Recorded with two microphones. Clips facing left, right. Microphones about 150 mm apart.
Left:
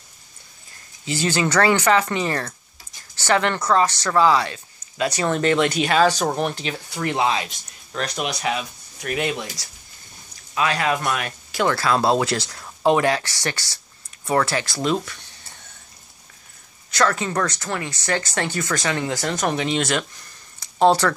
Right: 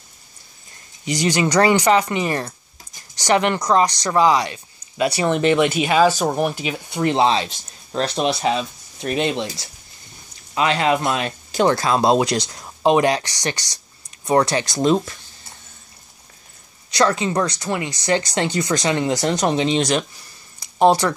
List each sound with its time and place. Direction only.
1.0 s speech: 15° right (ahead or behind)
6.9 s speech: 25° right (ahead or behind)
14.8 s speech: 30° right (ahead or behind)
16.9 s speech: 20° right (ahead or behind)